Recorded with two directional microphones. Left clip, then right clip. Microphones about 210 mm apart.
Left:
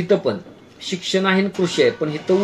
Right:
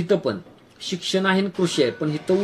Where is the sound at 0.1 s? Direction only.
50° right (ahead or behind).